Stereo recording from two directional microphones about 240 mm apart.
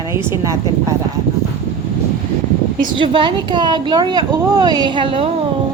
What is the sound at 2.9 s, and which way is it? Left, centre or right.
Speech, centre.